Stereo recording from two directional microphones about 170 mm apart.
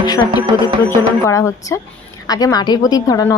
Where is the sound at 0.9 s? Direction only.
15° left (ahead or behind).